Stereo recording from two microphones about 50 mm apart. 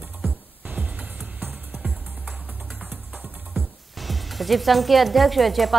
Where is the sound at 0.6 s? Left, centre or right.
Right.